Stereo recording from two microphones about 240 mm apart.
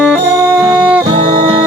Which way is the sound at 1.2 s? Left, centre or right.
Right.